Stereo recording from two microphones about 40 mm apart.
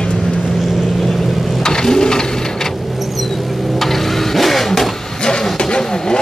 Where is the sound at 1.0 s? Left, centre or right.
Centre.